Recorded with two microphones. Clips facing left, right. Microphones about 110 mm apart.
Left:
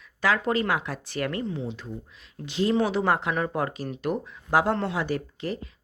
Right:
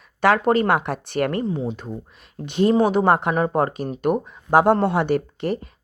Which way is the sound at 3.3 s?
40° right (ahead or behind).